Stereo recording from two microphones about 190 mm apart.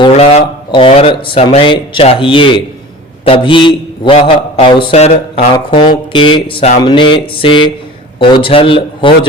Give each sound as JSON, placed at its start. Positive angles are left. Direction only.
{"t": 0.0, "sound": "speech", "side_deg": 30}